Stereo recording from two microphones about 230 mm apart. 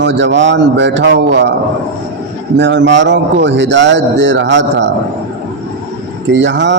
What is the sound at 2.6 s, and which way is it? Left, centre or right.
A man's voice, right.